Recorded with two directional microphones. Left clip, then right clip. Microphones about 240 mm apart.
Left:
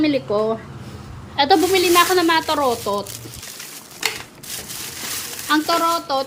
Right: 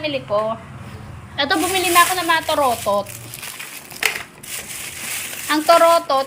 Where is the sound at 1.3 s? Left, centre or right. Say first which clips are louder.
Left 4 dB; centre.